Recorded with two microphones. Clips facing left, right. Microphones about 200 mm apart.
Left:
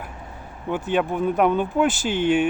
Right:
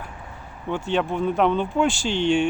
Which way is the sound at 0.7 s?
5° left (ahead or behind).